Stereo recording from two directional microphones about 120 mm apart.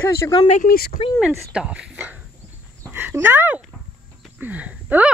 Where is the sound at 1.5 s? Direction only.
10° right (ahead or behind).